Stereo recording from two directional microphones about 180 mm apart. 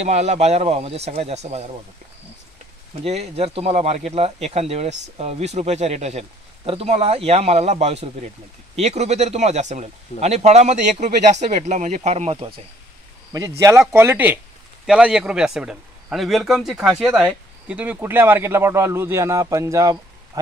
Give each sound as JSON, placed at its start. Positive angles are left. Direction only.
{"t": 0.0, "sound": "speech", "side_deg": -40}
{"t": 3.0, "sound": "speech", "side_deg": -35}
{"t": 13.3, "sound": "a man's voice", "side_deg": -20}